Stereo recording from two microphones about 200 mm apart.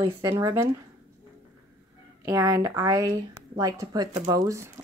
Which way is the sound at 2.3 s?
15° right (ahead or behind).